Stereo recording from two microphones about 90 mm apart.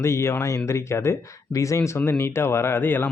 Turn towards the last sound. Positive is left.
turn(degrees=20)  # may be behind; listen again after turning